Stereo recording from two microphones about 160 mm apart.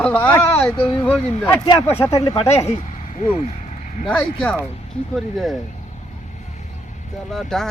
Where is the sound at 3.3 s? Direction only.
40° left (ahead or behind).